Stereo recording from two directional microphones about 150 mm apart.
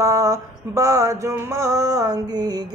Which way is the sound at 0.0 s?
20° right (ahead or behind).